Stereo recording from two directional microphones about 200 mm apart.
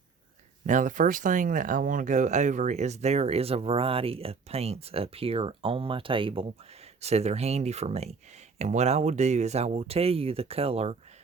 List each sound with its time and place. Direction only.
0.7 s speech: 40° right (ahead or behind)